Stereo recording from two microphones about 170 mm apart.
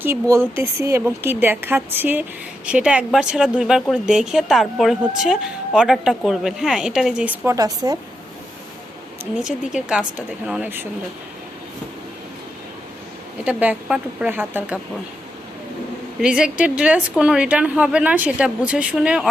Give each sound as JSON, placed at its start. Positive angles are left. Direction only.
{"t": 0.0, "sound": "speech", "side_deg": -15}
{"t": 7.5, "sound": "a woman's voice", "side_deg": -20}
{"t": 9.4, "sound": "speech", "side_deg": -5}
{"t": 13.4, "sound": "speech", "side_deg": -10}
{"t": 16.2, "sound": "speech", "side_deg": -5}